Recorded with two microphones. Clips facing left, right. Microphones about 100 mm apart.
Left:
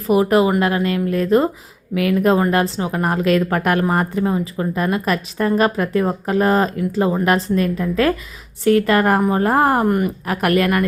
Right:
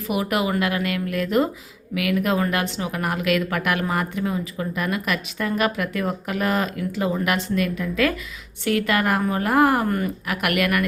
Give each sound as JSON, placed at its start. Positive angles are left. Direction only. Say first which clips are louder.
{"t": 0.1, "sound": "a woman's voice", "louder": "left 8 dB", "side_deg": 35}